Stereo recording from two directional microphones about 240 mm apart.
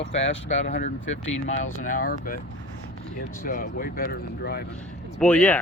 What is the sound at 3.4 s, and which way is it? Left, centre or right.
Speech, left.